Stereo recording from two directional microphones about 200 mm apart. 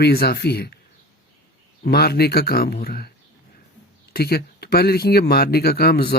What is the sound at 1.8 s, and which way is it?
Speech, 50° left (ahead or behind).